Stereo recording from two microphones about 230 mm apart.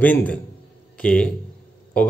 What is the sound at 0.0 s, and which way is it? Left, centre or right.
A man's voice, centre.